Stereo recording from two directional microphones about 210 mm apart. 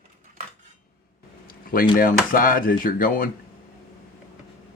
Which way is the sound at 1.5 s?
40° left (ahead or behind).